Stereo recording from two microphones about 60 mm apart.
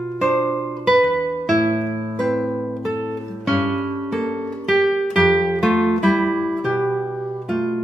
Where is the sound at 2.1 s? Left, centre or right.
Centre.